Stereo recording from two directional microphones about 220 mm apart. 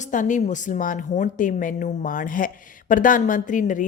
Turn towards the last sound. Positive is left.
turn(degrees=35)  # may be behind; listen again after turning